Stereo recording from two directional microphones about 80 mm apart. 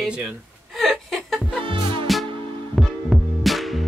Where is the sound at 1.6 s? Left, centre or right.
Right.